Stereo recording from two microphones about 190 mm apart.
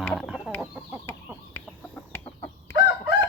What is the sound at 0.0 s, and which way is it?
Chicken, centre (ahead or behind).